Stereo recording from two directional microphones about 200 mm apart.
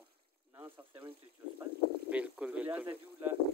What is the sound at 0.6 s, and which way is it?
Speech, 10° right (ahead or behind).